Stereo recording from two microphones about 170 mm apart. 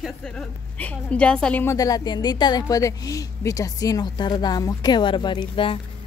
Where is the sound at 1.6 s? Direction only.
20° left (ahead or behind).